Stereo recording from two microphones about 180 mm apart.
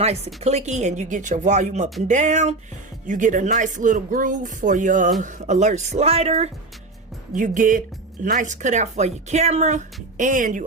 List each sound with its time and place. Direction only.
0.4 s speech: 40° right (ahead or behind)
7.3 s speech: 45° right (ahead or behind)